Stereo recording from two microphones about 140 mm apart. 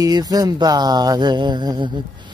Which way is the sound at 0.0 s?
30° right (ahead or behind).